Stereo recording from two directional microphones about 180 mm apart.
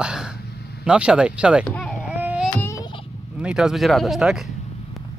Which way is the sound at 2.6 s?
15° left (ahead or behind).